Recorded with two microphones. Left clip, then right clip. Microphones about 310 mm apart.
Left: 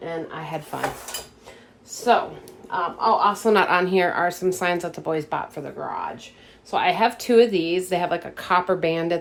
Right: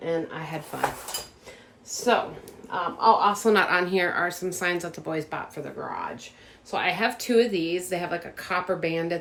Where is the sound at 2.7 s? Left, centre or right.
Centre.